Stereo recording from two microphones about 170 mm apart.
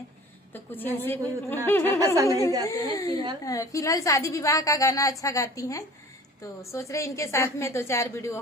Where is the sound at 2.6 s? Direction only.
20° left (ahead or behind).